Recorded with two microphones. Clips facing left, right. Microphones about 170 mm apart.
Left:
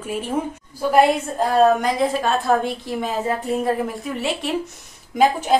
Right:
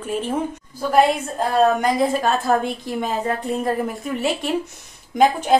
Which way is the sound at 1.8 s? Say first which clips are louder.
Right 1 dB; centre (ahead or behind).